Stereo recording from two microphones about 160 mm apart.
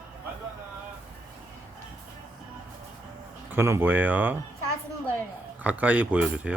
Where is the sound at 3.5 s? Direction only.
15° right (ahead or behind).